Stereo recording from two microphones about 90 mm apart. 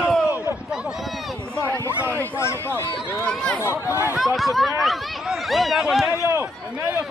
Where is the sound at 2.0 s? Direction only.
25° right (ahead or behind).